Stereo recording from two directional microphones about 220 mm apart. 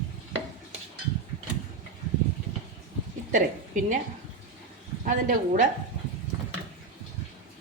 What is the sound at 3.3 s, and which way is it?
Speech, 35° right (ahead or behind).